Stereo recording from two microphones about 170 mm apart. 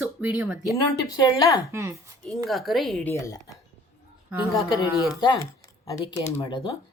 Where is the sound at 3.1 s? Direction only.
20° left (ahead or behind).